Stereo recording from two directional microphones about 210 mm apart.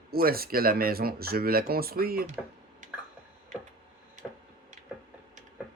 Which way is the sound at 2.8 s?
35° right (ahead or behind).